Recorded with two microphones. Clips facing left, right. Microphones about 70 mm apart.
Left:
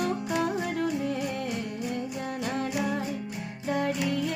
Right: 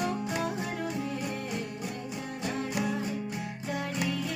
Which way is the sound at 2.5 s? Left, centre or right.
Left.